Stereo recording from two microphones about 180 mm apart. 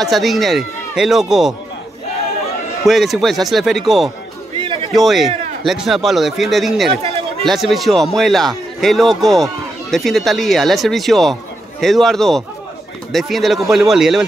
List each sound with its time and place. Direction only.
0.0 s a man's voice: centre (ahead or behind)
2.9 s a man's voice: centre (ahead or behind)
4.6 s a sound: 30° right (ahead or behind)
4.9 s a man's voice: centre (ahead or behind)